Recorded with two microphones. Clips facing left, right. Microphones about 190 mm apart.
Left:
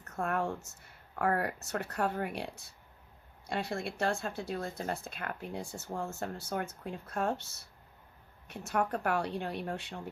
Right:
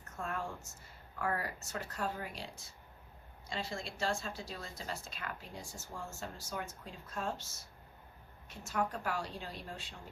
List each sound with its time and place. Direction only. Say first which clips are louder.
0.2 s speech: left 7 dB; 60° left (ahead or behind)